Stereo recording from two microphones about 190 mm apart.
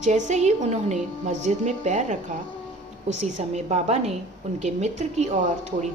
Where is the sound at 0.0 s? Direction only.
35° right (ahead or behind).